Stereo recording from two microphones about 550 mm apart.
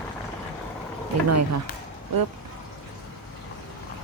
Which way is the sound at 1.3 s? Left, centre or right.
Right.